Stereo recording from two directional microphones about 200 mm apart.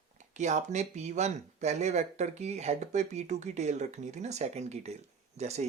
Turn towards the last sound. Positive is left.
turn(degrees=-35)  # may be behind; listen again after turning